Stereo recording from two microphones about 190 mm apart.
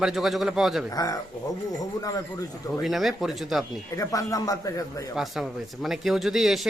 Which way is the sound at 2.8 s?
Centre (ahead or behind).